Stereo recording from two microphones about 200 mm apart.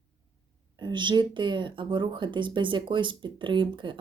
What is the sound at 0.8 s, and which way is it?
Speech, 25° right (ahead or behind).